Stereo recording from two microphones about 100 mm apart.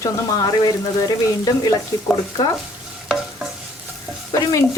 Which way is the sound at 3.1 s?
5° right (ahead or behind).